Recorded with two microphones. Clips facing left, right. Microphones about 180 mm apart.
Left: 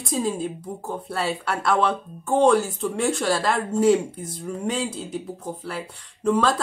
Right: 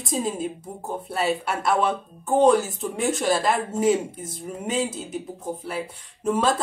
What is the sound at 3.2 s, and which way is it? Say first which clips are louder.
Speech: right 4 dB; 20° right (ahead or behind).